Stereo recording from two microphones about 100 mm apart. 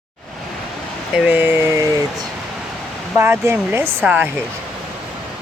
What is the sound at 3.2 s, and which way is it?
Speech, 25° right (ahead or behind).